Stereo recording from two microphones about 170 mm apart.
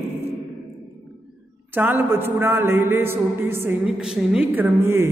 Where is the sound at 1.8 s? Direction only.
10° right (ahead or behind).